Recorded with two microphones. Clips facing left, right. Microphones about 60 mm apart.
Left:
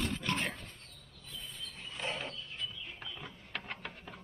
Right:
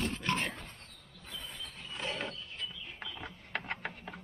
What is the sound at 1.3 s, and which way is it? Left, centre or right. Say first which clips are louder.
Cricket: right 2 dB; right.